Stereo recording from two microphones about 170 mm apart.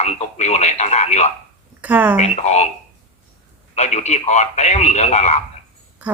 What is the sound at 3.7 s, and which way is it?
Speech, 40° left (ahead or behind).